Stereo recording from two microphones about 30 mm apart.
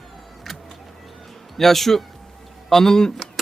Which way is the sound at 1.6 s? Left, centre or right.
Centre.